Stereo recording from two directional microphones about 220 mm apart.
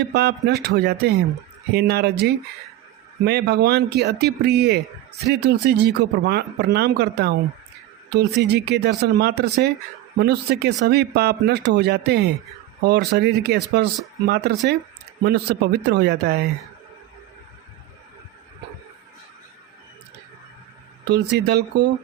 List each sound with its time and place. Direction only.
0.1 s speech: 50° right (ahead or behind)
21.1 s speech: 50° right (ahead or behind)